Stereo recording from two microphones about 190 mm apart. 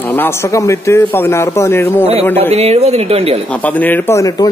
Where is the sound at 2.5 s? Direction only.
35° right (ahead or behind).